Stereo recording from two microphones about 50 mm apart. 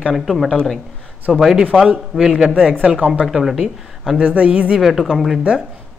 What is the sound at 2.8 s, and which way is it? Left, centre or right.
Speech, right.